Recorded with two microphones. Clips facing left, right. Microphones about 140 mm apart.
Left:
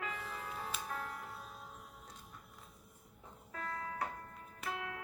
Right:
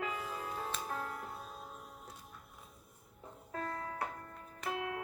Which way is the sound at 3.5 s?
40° right (ahead or behind).